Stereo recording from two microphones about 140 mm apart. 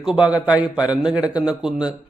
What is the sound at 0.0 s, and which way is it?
A man's voice, 5° right (ahead or behind).